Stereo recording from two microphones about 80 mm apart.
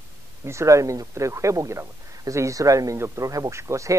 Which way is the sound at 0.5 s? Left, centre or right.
Right.